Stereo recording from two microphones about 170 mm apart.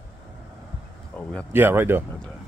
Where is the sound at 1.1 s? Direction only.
5° left (ahead or behind).